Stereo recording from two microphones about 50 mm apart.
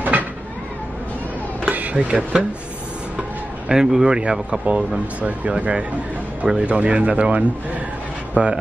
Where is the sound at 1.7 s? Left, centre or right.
Right.